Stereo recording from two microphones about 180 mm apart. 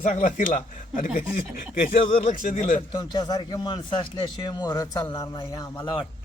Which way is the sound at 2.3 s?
45° left (ahead or behind).